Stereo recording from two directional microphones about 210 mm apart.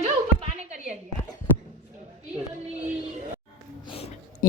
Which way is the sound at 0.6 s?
35° right (ahead or behind).